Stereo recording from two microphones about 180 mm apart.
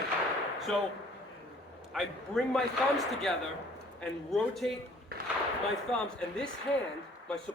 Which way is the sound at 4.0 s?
5° left (ahead or behind).